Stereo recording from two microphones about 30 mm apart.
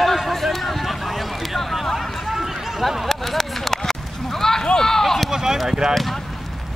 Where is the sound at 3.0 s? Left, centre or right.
Centre.